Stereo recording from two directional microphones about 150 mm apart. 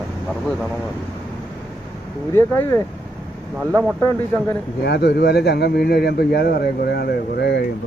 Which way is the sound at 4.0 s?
20° left (ahead or behind).